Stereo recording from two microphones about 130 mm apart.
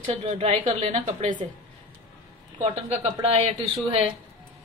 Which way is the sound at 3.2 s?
50° right (ahead or behind).